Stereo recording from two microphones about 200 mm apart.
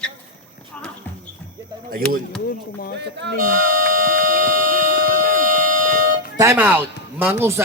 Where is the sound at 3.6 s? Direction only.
40° right (ahead or behind).